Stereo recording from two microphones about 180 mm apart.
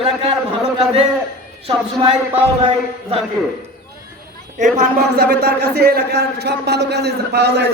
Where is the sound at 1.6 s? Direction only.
30° right (ahead or behind).